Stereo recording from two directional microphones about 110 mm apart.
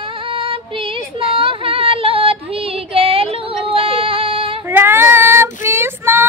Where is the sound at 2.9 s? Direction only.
60° right (ahead or behind).